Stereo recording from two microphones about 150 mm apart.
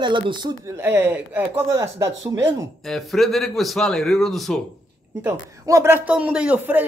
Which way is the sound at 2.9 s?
Centre (ahead or behind).